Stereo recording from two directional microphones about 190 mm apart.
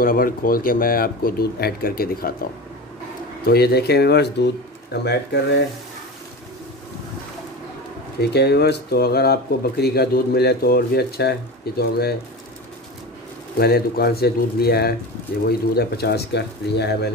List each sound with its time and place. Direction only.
0.0 s speech: 50° left (ahead or behind)
3.4 s speech: 55° left (ahead or behind)
8.2 s speech: 60° left (ahead or behind)
13.6 s speech: 55° left (ahead or behind)